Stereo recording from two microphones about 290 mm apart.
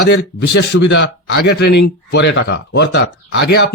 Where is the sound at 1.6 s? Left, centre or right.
Left.